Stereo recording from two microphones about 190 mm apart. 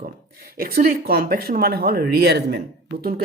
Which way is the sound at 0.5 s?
50° right (ahead or behind).